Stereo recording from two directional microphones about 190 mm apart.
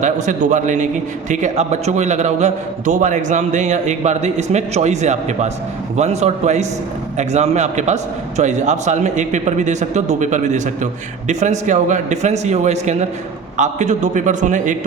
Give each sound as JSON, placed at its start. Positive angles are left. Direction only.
{"t": 0.0, "sound": "a man's voice", "side_deg": -40}